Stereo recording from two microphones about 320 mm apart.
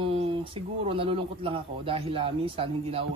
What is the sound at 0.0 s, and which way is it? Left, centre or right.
Speech, centre.